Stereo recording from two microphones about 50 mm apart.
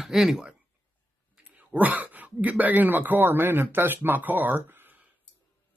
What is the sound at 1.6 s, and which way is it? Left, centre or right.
Speech, right.